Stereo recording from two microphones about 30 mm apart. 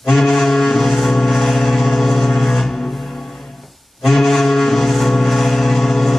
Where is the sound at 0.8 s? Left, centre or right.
Centre.